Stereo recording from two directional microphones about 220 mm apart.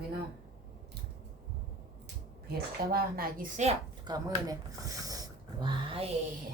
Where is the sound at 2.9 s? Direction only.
40° right (ahead or behind).